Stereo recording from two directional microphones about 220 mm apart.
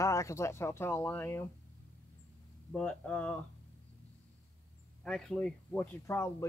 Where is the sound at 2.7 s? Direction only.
5° left (ahead or behind).